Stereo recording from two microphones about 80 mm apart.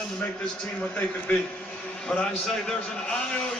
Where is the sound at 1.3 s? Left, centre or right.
Centre.